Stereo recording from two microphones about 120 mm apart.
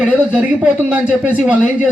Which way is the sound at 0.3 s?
10° right (ahead or behind).